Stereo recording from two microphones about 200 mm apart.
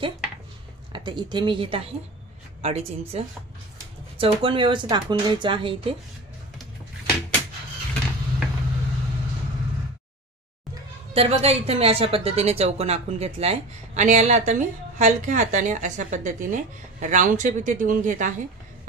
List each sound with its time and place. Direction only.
0.9 s a woman's voice: 25° right (ahead or behind)
11.1 s a woman's voice: 30° right (ahead or behind)